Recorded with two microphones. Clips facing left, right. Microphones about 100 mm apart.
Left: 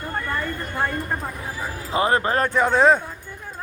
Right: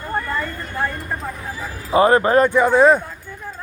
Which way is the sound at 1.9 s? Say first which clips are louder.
Right 6 dB; 30° right (ahead or behind).